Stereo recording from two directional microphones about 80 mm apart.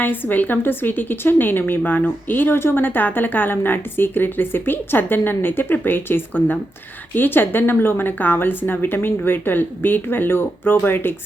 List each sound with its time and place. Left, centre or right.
0.0 s a woman's voice: left